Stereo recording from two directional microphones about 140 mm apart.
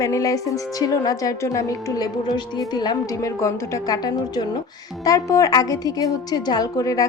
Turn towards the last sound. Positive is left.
turn(degrees=25)  # may be behind; listen again after turning